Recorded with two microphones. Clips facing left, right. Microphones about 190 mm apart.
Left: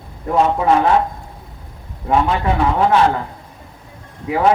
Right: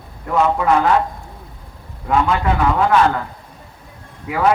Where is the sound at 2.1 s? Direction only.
30° left (ahead or behind).